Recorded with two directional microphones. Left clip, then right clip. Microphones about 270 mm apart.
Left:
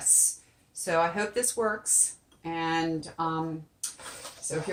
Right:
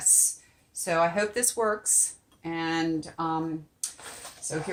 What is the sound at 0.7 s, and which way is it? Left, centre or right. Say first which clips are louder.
Speech: right 1 dB; right.